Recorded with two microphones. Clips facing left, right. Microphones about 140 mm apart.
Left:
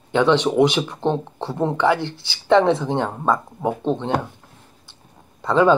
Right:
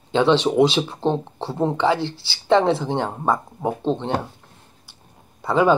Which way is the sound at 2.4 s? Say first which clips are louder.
Left 1 dB; 20° right (ahead or behind).